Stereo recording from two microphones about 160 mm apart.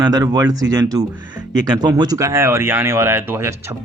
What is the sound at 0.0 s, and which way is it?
Speech, 25° right (ahead or behind).